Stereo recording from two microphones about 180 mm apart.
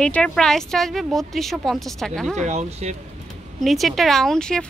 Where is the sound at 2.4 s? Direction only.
40° right (ahead or behind).